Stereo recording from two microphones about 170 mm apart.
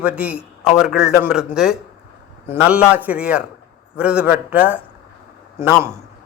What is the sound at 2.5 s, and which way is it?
A man's voice, 5° right (ahead or behind).